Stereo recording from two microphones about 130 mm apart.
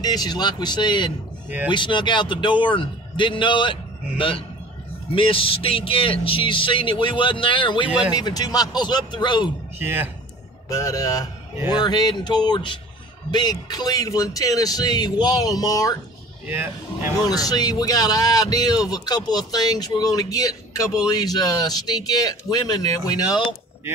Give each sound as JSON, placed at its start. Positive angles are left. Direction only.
{"t": 0.0, "sound": "a man's voice", "side_deg": 30}
{"t": 5.1, "sound": "a man's voice", "side_deg": 45}
{"t": 9.8, "sound": "speech", "side_deg": -15}
{"t": 10.7, "sound": "a man's voice", "side_deg": 25}
{"t": 16.4, "sound": "speech", "side_deg": -15}
{"t": 17.2, "sound": "speech", "side_deg": 30}